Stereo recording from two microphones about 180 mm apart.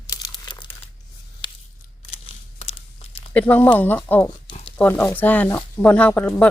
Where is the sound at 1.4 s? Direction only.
25° left (ahead or behind).